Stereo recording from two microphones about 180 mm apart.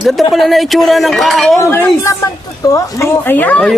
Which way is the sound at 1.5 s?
15° left (ahead or behind).